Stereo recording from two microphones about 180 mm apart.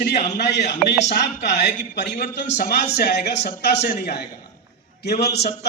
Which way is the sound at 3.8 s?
45° left (ahead or behind).